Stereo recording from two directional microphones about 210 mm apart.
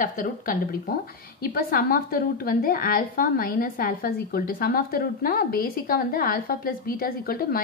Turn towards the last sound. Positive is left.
turn(degrees=45)  # may be behind; listen again after turning